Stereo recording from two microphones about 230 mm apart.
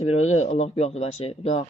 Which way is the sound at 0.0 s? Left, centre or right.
Left.